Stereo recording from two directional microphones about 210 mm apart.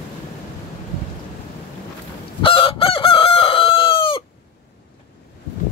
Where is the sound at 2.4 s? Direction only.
25° left (ahead or behind).